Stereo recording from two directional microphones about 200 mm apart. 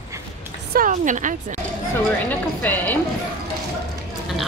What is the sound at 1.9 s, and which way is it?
Speech, 10° left (ahead or behind).